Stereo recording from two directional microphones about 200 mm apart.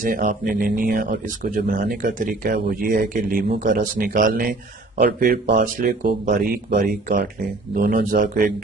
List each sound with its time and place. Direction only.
0.0 s speech: 40° right (ahead or behind)